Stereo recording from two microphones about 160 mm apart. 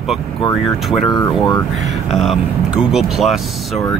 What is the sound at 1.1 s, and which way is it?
Speech, 25° left (ahead or behind).